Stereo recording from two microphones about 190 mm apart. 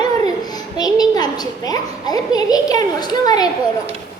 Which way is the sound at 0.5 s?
20° left (ahead or behind).